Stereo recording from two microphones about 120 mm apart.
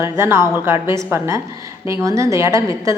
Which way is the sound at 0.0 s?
20° right (ahead or behind).